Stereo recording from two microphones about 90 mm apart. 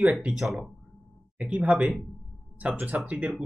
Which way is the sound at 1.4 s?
15° right (ahead or behind).